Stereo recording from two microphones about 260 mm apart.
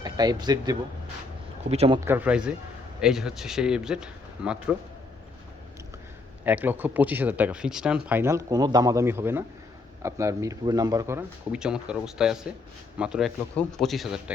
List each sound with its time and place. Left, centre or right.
0.0 s speech: centre
2.0 s speech: centre
6.4 s speech: centre